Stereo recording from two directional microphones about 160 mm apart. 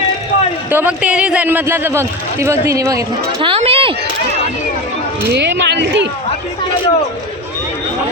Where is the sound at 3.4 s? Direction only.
35° right (ahead or behind).